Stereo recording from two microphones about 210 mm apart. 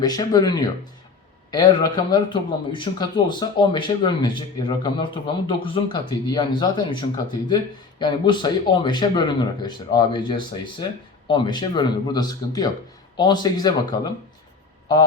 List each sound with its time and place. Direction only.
0.0 s speech: 20° left (ahead or behind)